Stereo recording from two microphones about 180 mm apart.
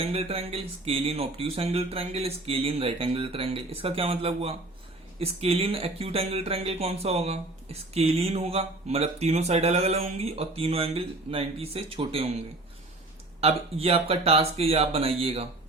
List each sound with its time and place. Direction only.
0.0 s speech: 35° right (ahead or behind)
13.4 s speech: 35° right (ahead or behind)